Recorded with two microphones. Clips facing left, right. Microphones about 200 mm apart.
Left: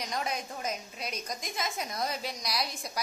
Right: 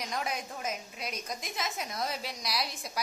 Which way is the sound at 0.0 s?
Centre (ahead or behind).